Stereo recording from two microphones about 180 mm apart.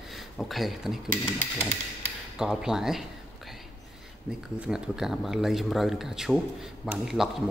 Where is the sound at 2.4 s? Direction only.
5° right (ahead or behind).